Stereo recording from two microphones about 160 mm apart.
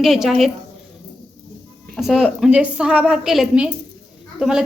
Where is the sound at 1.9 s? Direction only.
Centre (ahead or behind).